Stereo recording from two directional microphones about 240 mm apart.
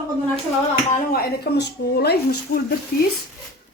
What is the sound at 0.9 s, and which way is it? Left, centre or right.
A woman's voice, left.